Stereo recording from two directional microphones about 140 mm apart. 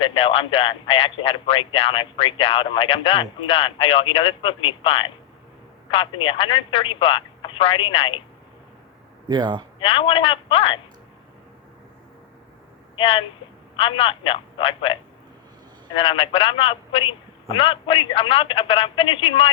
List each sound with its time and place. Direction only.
0.0 s speech: 40° left (ahead or behind)
9.3 s speech: 30° right (ahead or behind)
9.8 s speech: 40° left (ahead or behind)
13.0 s speech: 40° left (ahead or behind)
16.0 s speech: 40° left (ahead or behind)